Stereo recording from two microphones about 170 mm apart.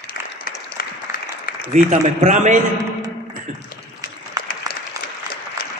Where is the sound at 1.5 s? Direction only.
60° left (ahead or behind).